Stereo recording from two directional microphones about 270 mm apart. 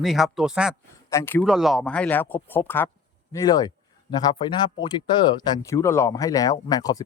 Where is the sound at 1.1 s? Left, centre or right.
Centre.